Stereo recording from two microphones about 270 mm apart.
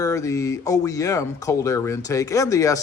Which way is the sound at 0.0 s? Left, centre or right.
Centre.